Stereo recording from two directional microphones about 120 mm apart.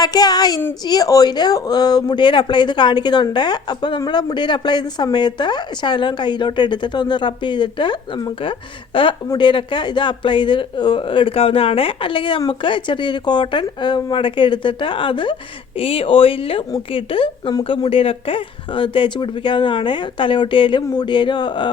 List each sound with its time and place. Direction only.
0.0 s speech: 35° left (ahead or behind)